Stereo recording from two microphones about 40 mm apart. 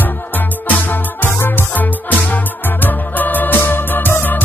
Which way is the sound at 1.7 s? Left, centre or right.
Left.